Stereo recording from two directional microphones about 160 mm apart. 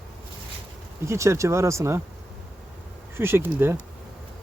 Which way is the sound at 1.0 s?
15° right (ahead or behind).